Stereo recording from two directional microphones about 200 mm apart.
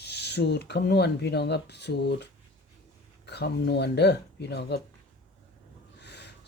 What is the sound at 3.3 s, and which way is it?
Speech, 55° left (ahead or behind).